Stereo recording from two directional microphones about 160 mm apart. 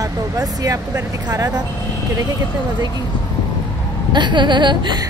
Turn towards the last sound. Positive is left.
turn(degrees=-30)  # may be behind; listen again after turning